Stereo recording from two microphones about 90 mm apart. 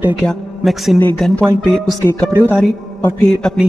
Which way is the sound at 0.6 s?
Centre (ahead or behind).